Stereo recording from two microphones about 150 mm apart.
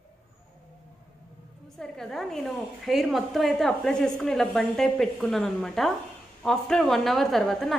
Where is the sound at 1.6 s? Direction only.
5° left (ahead or behind).